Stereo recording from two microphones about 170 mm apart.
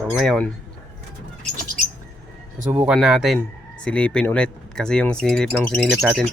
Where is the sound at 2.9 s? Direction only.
Centre (ahead or behind).